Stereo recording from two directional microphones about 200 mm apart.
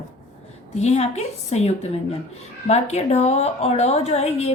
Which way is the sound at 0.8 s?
35° left (ahead or behind).